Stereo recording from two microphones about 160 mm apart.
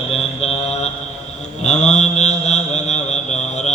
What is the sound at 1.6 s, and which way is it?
Mantra, 45° left (ahead or behind).